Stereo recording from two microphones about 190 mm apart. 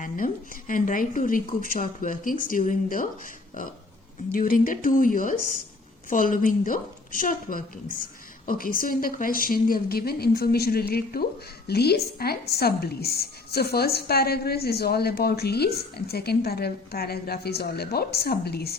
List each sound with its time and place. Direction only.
0.7 s a woman's voice: 45° left (ahead or behind)
4.3 s a woman's voice: 45° left (ahead or behind)